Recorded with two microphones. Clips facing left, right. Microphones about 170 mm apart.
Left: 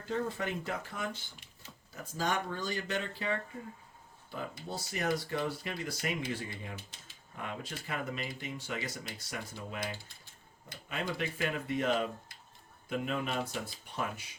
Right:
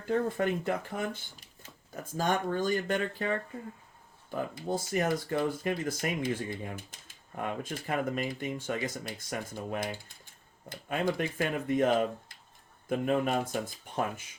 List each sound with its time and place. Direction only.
0.0 s speech: 55° right (ahead or behind)
12.9 s speech: 50° right (ahead or behind)